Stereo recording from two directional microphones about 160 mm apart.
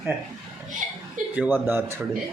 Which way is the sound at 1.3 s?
10° right (ahead or behind).